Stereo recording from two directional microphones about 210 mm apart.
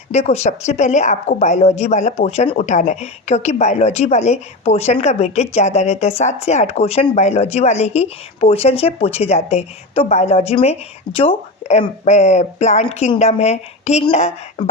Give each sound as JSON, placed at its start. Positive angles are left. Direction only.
{"t": 0.1, "sound": "speech", "side_deg": 30}